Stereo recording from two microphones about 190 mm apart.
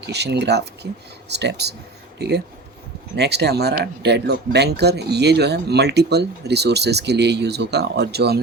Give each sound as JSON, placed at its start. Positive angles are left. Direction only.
{"t": 0.0, "sound": "speech", "side_deg": -60}